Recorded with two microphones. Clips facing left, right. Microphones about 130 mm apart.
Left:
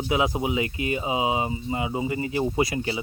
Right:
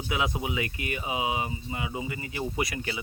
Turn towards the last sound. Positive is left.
turn(degrees=25)  # may be behind; listen again after turning